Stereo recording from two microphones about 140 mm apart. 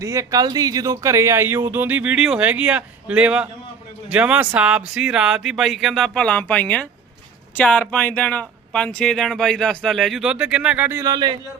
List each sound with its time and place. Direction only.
0.0 s speech: 20° right (ahead or behind)
11.1 s speech: 30° right (ahead or behind)